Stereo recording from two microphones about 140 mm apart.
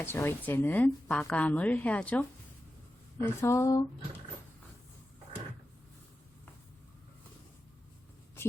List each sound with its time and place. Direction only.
0.0 s a woman's voice: 15° left (ahead or behind)